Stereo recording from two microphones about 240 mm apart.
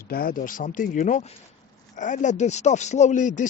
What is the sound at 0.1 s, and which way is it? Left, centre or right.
Speech, left.